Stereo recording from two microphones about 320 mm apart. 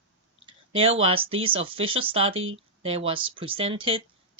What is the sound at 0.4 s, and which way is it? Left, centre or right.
Speech, centre.